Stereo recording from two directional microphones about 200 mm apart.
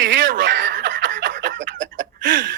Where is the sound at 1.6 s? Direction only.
65° right (ahead or behind).